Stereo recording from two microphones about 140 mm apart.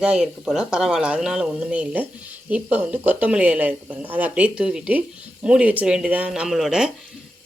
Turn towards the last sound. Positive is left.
turn(degrees=-5)  # may be behind; listen again after turning